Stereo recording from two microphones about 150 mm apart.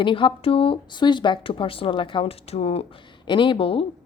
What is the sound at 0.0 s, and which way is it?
Speech, 35° left (ahead or behind).